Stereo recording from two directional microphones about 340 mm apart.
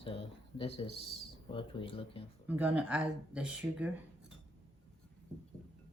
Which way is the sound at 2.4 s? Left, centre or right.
Centre.